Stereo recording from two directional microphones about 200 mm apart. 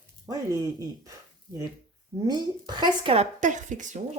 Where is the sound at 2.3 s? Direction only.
20° right (ahead or behind); by 4.0 s 35° right (ahead or behind).